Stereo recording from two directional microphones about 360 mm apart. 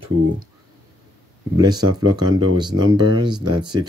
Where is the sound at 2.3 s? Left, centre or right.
Right.